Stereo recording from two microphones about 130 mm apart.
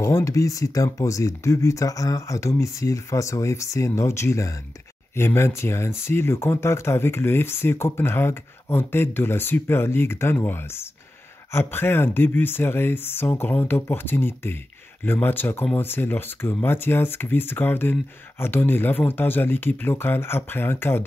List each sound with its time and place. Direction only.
0.0 s speech: 25° left (ahead or behind)